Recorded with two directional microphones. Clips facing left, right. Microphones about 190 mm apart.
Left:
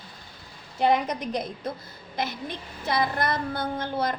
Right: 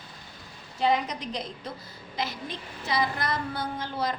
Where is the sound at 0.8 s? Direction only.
55° left (ahead or behind).